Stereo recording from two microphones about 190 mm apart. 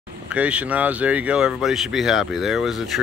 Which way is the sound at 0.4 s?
5° right (ahead or behind).